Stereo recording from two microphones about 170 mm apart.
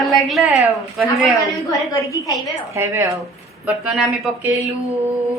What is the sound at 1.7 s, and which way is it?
Speech, 20° left (ahead or behind).